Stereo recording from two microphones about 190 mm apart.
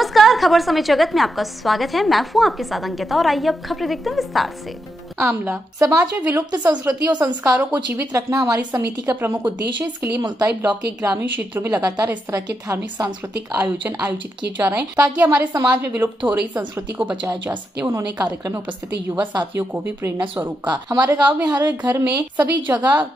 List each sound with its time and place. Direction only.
0.0 s a woman's voice: centre (ahead or behind)
5.1 s a woman's voice: 10° right (ahead or behind)
11.0 s a woman's voice: 15° right (ahead or behind)
21.0 s a woman's voice: 10° right (ahead or behind)